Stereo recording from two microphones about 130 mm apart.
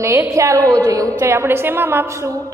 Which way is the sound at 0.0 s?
20° right (ahead or behind).